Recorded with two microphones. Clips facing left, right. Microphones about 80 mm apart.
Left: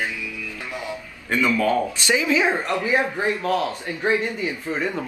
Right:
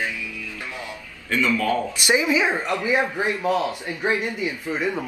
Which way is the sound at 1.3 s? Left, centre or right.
Left.